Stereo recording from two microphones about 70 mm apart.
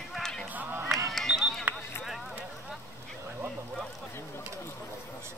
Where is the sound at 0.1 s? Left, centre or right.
Centre.